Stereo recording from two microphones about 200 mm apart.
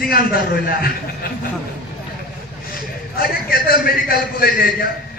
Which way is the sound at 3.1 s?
50° left (ahead or behind).